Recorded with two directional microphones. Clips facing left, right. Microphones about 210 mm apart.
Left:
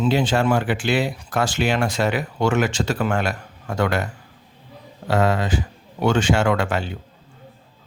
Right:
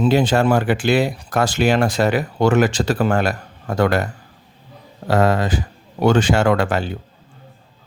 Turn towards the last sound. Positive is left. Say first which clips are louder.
# right 3 dB
turn(degrees=-40)  # may be behind; listen again after turning